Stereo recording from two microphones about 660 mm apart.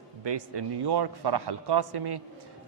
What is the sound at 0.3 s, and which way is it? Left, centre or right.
A man's voice, right.